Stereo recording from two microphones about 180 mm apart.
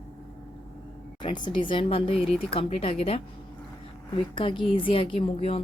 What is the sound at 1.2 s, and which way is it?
Speech, 25° left (ahead or behind).